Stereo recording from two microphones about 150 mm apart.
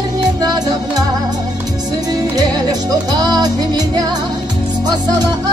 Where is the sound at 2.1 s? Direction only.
25° right (ahead or behind).